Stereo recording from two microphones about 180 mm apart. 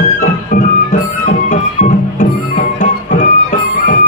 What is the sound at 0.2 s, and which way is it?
Music, 40° left (ahead or behind).